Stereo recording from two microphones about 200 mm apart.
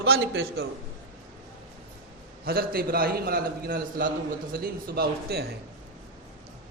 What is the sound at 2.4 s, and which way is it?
A man's voice, 50° right (ahead or behind).